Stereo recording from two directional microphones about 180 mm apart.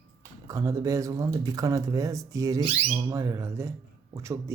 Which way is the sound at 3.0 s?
20° right (ahead or behind).